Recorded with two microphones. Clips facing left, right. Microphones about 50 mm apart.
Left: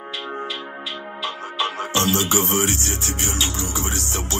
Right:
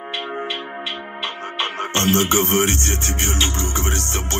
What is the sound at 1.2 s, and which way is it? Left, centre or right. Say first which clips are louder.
Music: even; right.